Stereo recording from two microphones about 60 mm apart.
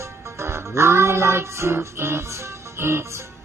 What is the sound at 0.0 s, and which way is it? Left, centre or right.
Music, right.